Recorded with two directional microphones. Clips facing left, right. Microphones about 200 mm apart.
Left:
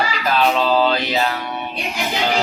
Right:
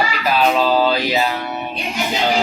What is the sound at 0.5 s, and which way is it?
Music, 5° right (ahead or behind).